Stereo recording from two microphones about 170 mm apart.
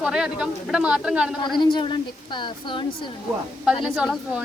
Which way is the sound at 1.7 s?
25° left (ahead or behind).